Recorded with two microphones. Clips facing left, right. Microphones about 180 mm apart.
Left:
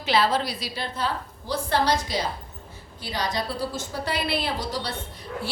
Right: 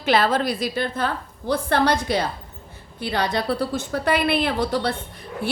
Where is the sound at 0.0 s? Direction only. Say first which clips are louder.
Right 3 dB; 50° right (ahead or behind).